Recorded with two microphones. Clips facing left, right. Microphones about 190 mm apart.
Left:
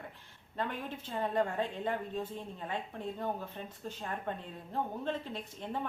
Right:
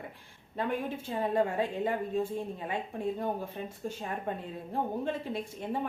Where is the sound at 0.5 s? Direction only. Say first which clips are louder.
Right 5 dB; 10° right (ahead or behind).